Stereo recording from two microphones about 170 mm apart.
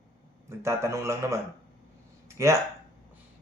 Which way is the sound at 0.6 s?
15° right (ahead or behind).